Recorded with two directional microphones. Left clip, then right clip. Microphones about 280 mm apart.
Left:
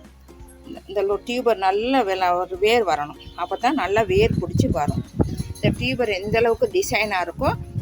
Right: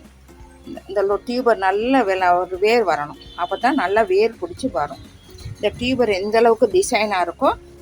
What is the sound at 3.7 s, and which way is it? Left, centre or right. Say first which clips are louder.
Speech: right 2 dB; left.